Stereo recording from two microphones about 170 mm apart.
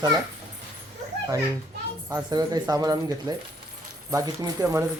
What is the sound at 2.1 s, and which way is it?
Speech, 25° right (ahead or behind).